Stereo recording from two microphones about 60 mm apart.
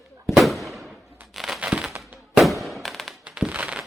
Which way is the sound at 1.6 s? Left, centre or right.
Centre.